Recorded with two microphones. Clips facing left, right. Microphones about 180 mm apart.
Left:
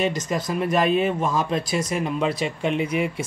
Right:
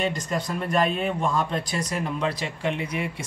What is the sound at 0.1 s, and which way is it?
Speech, 90° left.